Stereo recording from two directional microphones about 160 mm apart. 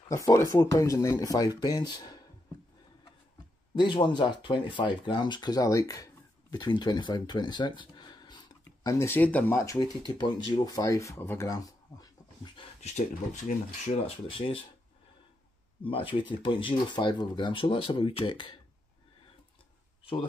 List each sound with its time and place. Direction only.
0.1 s speech: 20° left (ahead or behind)
3.7 s speech: 30° left (ahead or behind)
9.0 s speech: 10° left (ahead or behind)
12.5 s speech: 45° left (ahead or behind)
15.8 s speech: 35° left (ahead or behind)